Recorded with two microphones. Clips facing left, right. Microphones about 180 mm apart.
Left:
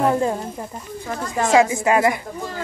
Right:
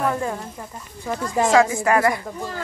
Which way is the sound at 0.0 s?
25° left (ahead or behind).